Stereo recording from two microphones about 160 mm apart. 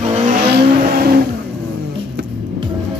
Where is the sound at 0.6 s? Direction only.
85° right.